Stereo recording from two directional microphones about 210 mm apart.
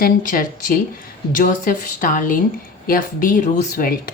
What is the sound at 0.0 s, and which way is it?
Speech, 40° left (ahead or behind).